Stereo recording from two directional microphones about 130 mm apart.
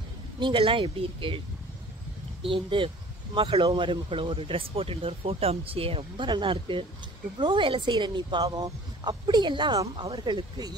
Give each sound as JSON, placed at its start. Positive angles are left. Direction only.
{"t": 0.4, "sound": "speech", "side_deg": -40}
{"t": 2.4, "sound": "speech", "side_deg": -45}